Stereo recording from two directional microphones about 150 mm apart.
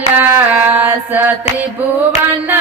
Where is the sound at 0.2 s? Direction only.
10° right (ahead or behind).